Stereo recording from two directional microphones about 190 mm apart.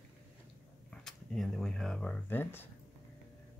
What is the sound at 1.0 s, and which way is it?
Speech, centre (ahead or behind).